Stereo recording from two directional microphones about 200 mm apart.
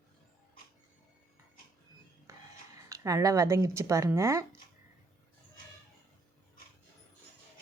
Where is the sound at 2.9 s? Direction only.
15° right (ahead or behind).